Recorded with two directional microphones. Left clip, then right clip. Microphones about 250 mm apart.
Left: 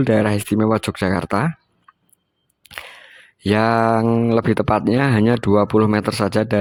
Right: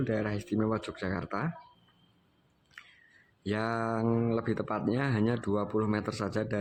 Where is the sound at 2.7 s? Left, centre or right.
Left.